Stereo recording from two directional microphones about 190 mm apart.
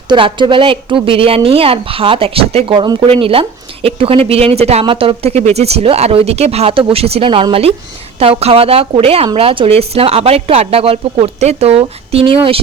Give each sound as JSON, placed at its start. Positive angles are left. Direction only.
{"t": 0.1, "sound": "a woman's voice", "side_deg": -25}